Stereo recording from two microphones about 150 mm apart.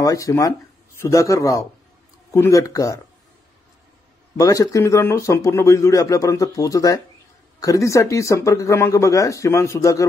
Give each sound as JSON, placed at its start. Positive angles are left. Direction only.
{"t": 0.0, "sound": "speech", "side_deg": 20}
{"t": 4.4, "sound": "speech", "side_deg": 20}